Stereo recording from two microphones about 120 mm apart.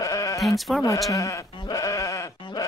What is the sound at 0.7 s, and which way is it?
Speech, centre (ahead or behind).